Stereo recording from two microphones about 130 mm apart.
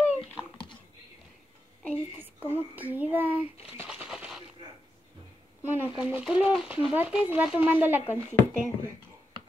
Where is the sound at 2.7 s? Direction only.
10° right (ahead or behind).